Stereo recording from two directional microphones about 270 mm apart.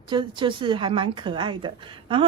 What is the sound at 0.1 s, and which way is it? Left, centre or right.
A woman's voice, centre.